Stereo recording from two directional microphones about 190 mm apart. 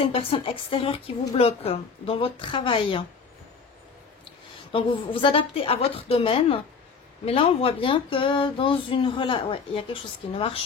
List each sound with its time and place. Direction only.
0.0 s a woman's voice: 30° left (ahead or behind)
4.7 s a woman's voice: 30° left (ahead or behind)